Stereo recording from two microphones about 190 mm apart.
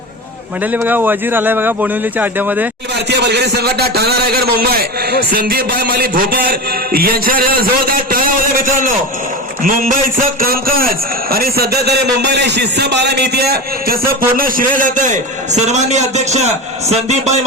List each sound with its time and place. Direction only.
0.6 s speech: 10° right (ahead or behind)
3.1 s a man's voice: 60° right (ahead or behind); by 17.4 s 35° right (ahead or behind)